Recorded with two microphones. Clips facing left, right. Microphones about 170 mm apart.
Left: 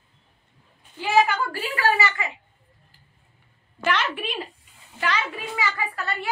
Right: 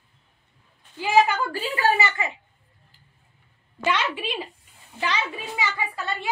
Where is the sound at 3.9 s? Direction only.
15° right (ahead or behind).